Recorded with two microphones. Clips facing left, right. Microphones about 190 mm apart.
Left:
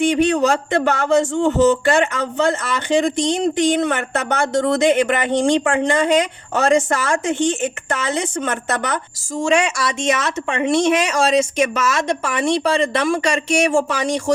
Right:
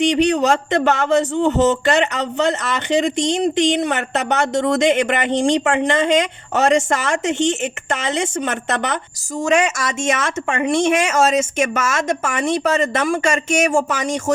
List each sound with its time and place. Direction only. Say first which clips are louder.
0.0 s speech: even; 20° right (ahead or behind)
9.4 s speech: even; 45° right (ahead or behind)